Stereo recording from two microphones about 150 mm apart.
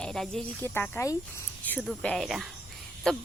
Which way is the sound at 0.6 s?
15° left (ahead or behind).